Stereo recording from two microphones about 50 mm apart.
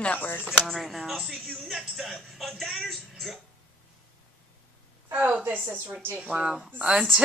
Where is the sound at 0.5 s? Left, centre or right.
Centre.